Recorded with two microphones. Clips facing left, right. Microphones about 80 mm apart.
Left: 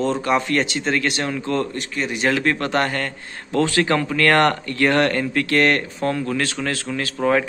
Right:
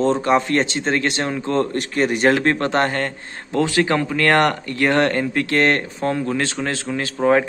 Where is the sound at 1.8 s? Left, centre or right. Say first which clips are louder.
Right 5 dB; right.